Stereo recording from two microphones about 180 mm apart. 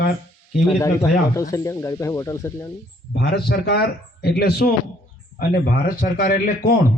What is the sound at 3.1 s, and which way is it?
A man's voice, 65° left (ahead or behind).